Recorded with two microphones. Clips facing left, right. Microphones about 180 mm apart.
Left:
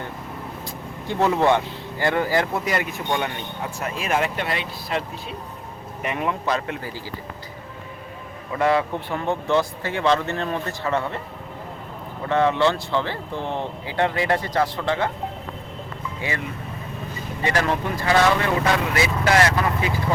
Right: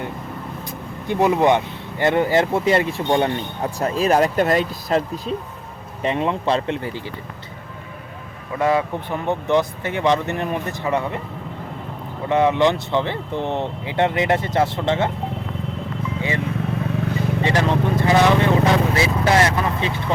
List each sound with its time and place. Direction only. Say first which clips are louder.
1.0 s speech: right 3 dB; 15° right (ahead or behind); by 5.3 s 40° right (ahead or behind)
6.0 s speech: right 5 dB; 25° right (ahead or behind)
8.5 s speech: right 1 dB; 15° right (ahead or behind)
12.3 s speech: right 3 dB; 15° right (ahead or behind)
17.4 s speech: right 1 dB; 20° right (ahead or behind)
18.7 s vehicle: right 3 dB; 25° right (ahead or behind)